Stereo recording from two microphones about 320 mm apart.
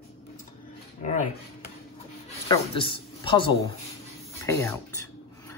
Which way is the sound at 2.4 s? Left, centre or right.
Centre.